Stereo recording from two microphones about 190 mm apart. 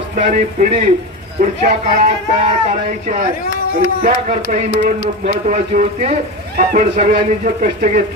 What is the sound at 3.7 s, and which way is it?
Speech, 45° right (ahead or behind).